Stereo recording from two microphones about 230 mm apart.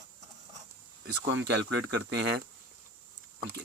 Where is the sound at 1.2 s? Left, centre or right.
Right.